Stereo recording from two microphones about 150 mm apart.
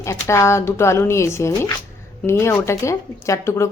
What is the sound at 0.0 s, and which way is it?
A woman's voice, 20° left (ahead or behind).